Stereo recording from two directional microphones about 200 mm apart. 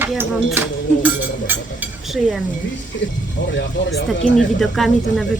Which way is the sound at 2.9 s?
65° left (ahead or behind).